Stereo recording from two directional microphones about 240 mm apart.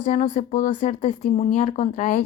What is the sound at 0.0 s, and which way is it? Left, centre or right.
Speech, left.